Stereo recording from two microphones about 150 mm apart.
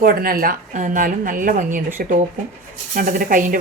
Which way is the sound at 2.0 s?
70° right (ahead or behind).